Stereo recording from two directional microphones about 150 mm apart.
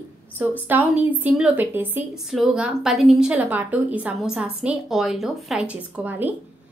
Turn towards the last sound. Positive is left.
turn(degrees=-10)  # may be behind; listen again after turning